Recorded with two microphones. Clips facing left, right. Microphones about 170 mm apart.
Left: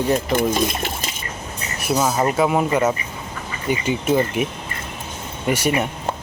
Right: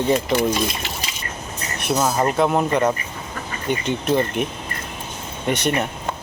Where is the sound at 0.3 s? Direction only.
50° left (ahead or behind).